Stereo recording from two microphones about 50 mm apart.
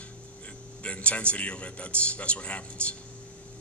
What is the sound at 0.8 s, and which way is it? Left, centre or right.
A man's voice, left.